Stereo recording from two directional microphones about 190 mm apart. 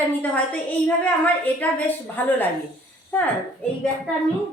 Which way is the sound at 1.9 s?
10° left (ahead or behind).